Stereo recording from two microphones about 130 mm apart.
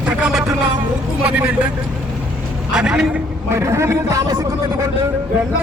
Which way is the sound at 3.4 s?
20° right (ahead or behind).